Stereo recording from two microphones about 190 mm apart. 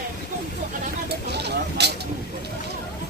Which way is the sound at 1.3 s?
60° right (ahead or behind).